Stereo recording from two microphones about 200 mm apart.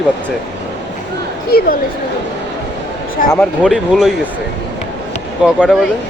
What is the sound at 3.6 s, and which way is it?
Speech, centre (ahead or behind).